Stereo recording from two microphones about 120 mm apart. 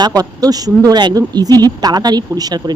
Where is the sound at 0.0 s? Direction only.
30° right (ahead or behind).